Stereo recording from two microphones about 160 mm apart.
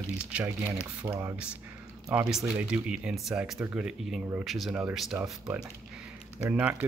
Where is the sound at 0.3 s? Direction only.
5° right (ahead or behind).